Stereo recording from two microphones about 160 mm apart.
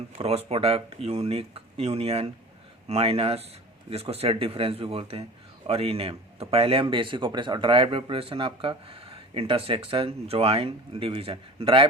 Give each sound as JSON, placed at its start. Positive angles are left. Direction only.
{"t": 0.2, "sound": "speech", "side_deg": -40}